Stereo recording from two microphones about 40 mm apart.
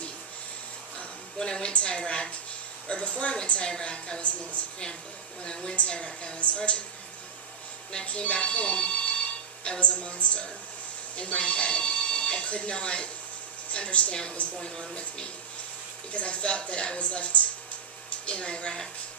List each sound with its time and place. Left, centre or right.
1.4 s a woman's voice: centre
5.7 s a woman's voice: left
8.0 s a woman's voice: left